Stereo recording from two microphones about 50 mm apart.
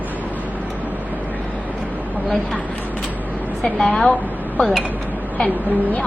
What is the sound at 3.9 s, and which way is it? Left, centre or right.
Speech, left.